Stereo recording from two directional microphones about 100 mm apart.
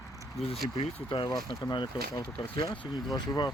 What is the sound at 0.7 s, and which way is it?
Speech, 60° left (ahead or behind).